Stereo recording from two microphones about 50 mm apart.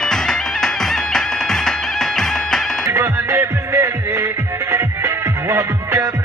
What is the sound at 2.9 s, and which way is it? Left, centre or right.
Music, right.